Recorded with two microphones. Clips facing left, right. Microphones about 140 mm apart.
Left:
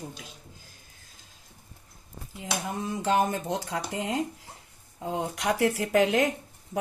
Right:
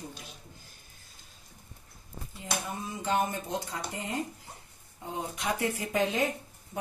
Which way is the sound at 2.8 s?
90° left.